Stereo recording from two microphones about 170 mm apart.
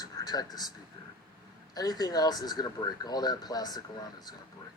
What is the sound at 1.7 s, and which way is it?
Speech, 25° left (ahead or behind).